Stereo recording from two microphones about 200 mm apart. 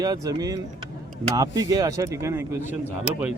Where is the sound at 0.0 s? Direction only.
20° right (ahead or behind).